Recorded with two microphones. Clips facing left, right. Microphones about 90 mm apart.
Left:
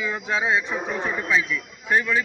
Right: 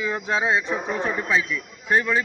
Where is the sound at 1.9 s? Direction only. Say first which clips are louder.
Right 1 dB; 35° right (ahead or behind).